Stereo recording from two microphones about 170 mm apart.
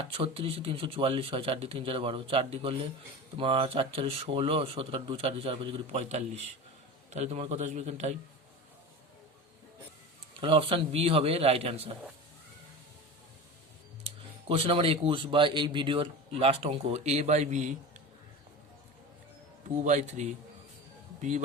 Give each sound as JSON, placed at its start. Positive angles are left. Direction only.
{"t": 0.0, "sound": "speech", "side_deg": -35}
{"t": 10.4, "sound": "speech", "side_deg": -30}
{"t": 14.0, "sound": "speech", "side_deg": -35}
{"t": 19.8, "sound": "speech", "side_deg": -45}